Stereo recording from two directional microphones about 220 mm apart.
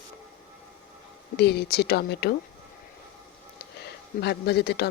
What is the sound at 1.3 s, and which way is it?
Speech, 50° left (ahead or behind).